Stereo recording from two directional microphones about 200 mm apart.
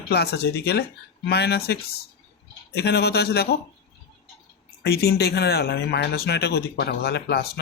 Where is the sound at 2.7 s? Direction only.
55° left (ahead or behind).